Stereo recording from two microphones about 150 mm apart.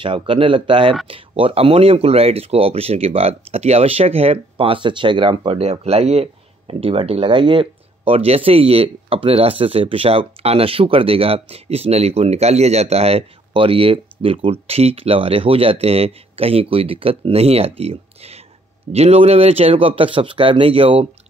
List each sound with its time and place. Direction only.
0.0 s speech: 35° right (ahead or behind)